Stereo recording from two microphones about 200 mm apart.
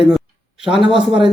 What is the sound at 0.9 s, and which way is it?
Speech, 25° right (ahead or behind).